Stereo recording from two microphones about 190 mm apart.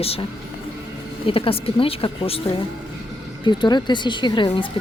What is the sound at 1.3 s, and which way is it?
A woman's voice, 30° left (ahead or behind).